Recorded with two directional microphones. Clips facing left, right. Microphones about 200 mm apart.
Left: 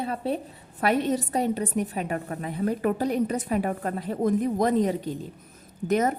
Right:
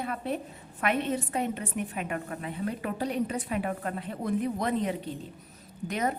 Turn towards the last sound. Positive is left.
turn(degrees=45)  # may be behind; listen again after turning